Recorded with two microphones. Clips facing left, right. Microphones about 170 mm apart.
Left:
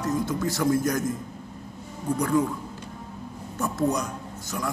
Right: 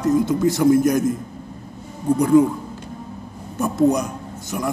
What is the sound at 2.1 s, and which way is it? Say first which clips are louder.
Speech: right 9 dB; 20° right (ahead or behind).